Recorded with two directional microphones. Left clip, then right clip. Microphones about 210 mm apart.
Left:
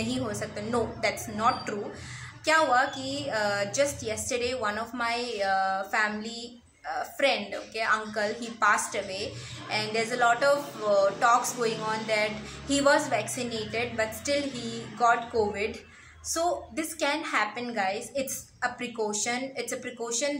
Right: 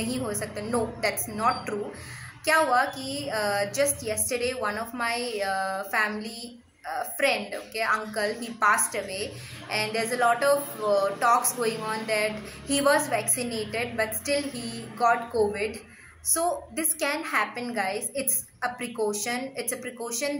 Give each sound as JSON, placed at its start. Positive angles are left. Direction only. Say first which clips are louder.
{"t": 0.0, "sound": "a woman's voice", "louder": "right 1 dB", "side_deg": 0}